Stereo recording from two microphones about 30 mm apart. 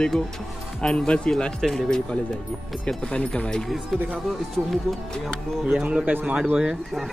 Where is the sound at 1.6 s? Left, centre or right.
Centre.